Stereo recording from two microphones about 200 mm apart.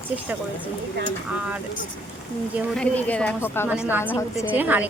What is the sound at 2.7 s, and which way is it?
Speech, 5° left (ahead or behind).